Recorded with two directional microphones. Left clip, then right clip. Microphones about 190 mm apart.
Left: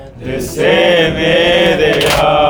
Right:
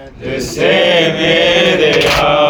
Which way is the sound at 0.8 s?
35° left (ahead or behind).